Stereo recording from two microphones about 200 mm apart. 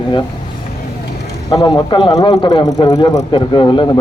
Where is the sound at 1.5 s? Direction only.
25° left (ahead or behind).